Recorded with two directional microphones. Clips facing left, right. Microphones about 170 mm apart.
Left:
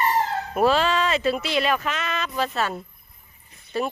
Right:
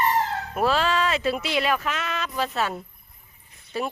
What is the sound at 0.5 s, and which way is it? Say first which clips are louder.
Speech: left 3 dB; centre (ahead or behind).